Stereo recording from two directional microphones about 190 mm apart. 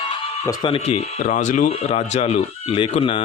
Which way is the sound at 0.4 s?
25° left (ahead or behind).